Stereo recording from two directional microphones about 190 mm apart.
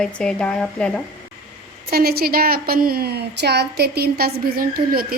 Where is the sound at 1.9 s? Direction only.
55° right (ahead or behind).